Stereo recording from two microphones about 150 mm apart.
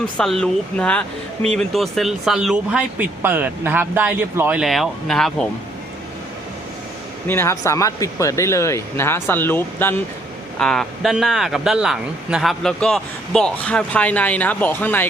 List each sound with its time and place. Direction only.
0.0 s speech: 5° left (ahead or behind); by 4.6 s 10° right (ahead or behind)
4.6 s speech: centre (ahead or behind)
7.3 s speech: 20° left (ahead or behind)
10.6 s speech: 5° left (ahead or behind)